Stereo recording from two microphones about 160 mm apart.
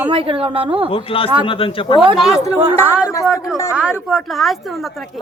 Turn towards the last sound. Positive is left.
turn(degrees=0)  # may be behind; listen again after turning